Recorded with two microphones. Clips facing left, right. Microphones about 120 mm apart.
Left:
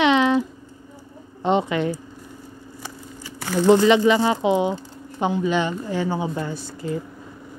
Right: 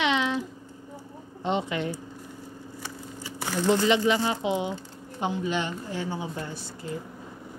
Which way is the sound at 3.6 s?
90° left.